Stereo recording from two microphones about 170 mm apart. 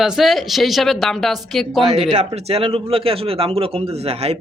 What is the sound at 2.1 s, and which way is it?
A man's voice, 40° right (ahead or behind).